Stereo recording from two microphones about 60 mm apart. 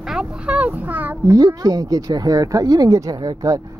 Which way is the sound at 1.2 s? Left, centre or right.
Right.